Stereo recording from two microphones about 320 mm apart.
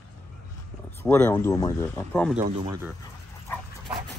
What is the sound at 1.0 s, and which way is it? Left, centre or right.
Speech, centre.